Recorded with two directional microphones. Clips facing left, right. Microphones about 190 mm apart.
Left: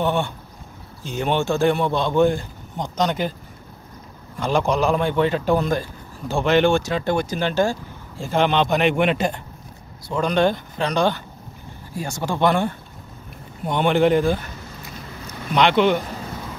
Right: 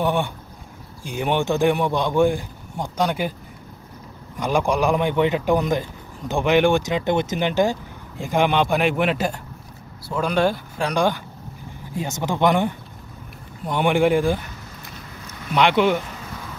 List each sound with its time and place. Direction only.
0.0 s speech: 15° right (ahead or behind)
4.4 s speech: 10° right (ahead or behind)
15.5 s speech: 10° right (ahead or behind)